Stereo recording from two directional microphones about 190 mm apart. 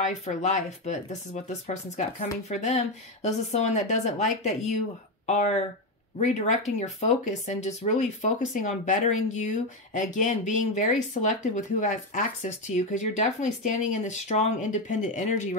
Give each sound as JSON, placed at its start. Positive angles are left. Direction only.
{"t": 0.0, "sound": "speech", "side_deg": 40}